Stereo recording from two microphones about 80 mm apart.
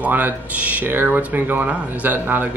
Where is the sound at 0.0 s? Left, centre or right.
Centre.